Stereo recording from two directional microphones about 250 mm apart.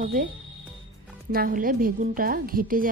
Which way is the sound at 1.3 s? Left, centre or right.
Right.